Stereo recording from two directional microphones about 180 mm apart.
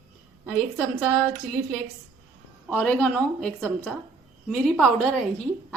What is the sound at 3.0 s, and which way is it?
A woman's voice, 5° left (ahead or behind).